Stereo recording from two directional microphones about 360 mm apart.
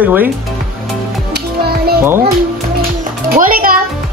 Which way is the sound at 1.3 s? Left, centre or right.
Right.